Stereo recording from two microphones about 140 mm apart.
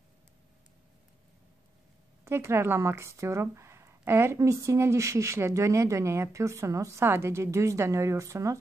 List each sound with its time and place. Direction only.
2.2 s speech: 20° right (ahead or behind)